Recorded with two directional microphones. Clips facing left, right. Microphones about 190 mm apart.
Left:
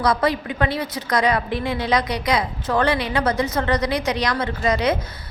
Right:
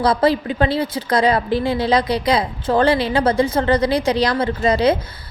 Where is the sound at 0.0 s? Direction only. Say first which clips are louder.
Right 4 dB; 30° right (ahead or behind).